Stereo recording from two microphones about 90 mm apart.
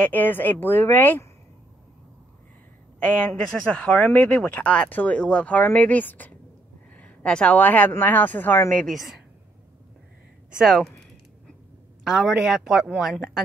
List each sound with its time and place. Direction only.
0.0 s speech: 20° left (ahead or behind)
3.0 s speech: 10° left (ahead or behind)
8.8 s speech: centre (ahead or behind)
10.6 s speech: centre (ahead or behind)
12.0 s speech: centre (ahead or behind)